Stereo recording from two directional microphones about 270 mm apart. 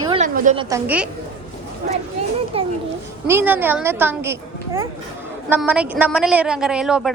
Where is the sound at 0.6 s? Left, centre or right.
Centre.